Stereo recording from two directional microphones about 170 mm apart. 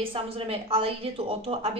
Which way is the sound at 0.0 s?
30° right (ahead or behind).